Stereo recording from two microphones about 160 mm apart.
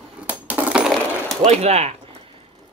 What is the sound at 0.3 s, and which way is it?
Coin, 10° right (ahead or behind).